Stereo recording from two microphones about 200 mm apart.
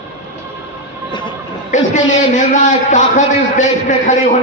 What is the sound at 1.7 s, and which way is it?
A man's voice, 35° left (ahead or behind).